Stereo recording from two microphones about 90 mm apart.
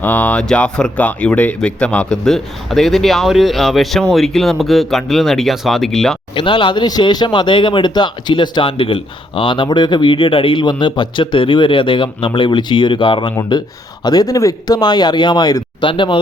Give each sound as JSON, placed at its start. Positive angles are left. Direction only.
{"t": 0.0, "sound": "a man's voice", "side_deg": 20}
{"t": 6.3, "sound": "speech", "side_deg": 65}
{"t": 14.0, "sound": "speech", "side_deg": 45}
{"t": 14.8, "sound": "speech", "side_deg": 55}
{"t": 15.9, "sound": "speech", "side_deg": 65}